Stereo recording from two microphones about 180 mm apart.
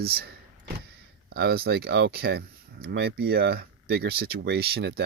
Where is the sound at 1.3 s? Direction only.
60° right (ahead or behind).